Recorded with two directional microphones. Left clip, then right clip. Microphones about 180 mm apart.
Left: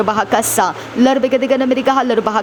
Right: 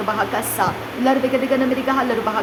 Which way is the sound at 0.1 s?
50° left (ahead or behind).